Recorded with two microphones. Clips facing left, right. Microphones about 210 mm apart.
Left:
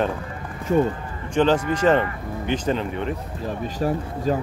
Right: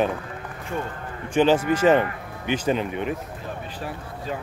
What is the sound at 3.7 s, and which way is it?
Speech, 40° left (ahead or behind).